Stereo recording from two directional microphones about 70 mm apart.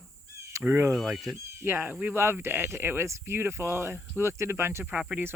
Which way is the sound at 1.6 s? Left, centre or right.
Right.